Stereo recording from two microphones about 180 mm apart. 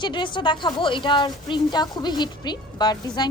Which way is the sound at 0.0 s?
25° left (ahead or behind).